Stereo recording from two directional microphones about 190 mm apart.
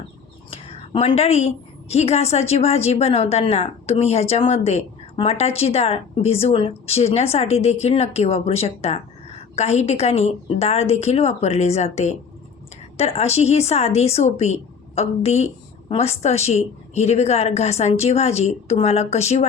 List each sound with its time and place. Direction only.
0.5 s a woman's voice: 30° left (ahead or behind)